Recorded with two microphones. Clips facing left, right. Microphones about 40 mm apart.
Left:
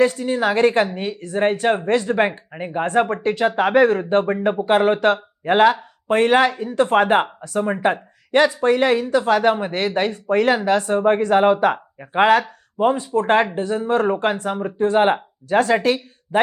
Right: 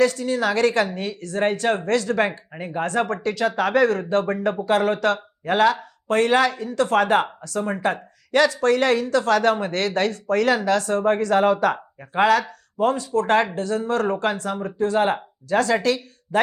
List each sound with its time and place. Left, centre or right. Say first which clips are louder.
0.0 s speech: left 2 dB; left